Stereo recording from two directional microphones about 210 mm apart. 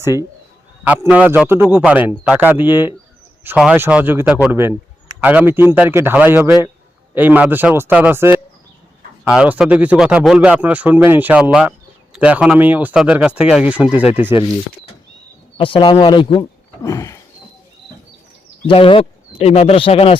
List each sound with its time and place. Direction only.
0.0 s speech: 10° right (ahead or behind)
15.5 s speech: 25° left (ahead or behind)
18.7 s speech: 25° left (ahead or behind)